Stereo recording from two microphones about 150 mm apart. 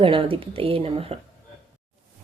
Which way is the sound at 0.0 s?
35° right (ahead or behind).